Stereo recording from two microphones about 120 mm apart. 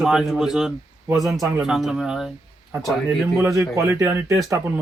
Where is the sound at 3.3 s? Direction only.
25° right (ahead or behind).